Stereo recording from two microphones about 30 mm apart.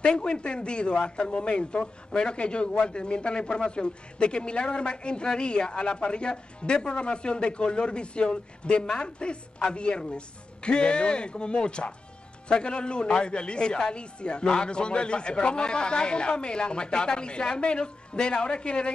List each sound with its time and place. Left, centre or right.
0.0 s a man's voice: left